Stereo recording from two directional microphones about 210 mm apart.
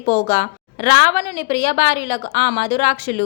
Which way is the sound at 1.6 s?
40° left (ahead or behind).